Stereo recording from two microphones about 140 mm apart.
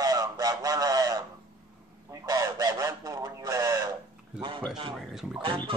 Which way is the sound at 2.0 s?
25° right (ahead or behind).